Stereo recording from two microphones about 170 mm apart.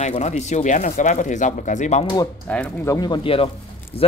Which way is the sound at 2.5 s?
10° left (ahead or behind).